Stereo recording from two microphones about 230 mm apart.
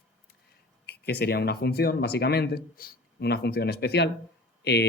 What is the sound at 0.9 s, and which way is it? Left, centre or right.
Speech, left.